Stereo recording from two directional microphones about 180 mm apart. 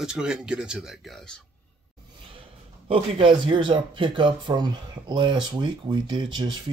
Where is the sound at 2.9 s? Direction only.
30° right (ahead or behind).